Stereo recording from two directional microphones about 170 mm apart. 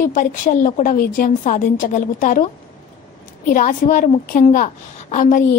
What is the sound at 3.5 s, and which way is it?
A woman's voice, 55° left (ahead or behind).